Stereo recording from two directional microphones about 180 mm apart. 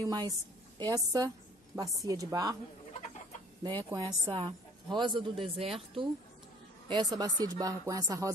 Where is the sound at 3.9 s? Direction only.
20° right (ahead or behind).